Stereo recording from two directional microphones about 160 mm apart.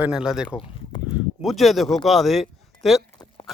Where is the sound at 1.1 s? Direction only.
Centre (ahead or behind).